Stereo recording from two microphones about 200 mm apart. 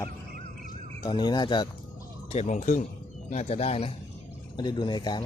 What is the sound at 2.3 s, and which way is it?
Speech, 30° left (ahead or behind).